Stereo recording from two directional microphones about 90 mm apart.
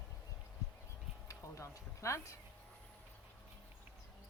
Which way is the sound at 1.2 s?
35° left (ahead or behind).